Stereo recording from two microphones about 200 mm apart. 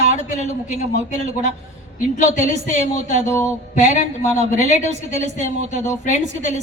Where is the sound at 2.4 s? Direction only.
40° left (ahead or behind).